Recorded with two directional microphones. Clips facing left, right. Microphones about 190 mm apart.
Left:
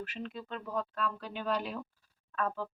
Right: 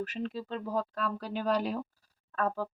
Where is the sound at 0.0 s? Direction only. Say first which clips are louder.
Right 5 dB; 40° right (ahead or behind).